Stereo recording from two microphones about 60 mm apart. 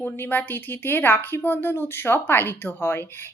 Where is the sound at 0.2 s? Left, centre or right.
Left.